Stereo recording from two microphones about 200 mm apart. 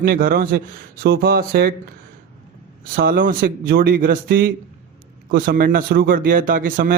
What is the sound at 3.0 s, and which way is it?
A man's voice, 45° right (ahead or behind).